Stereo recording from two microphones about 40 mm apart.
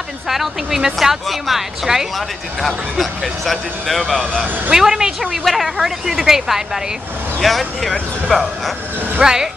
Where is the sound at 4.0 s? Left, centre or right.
Centre.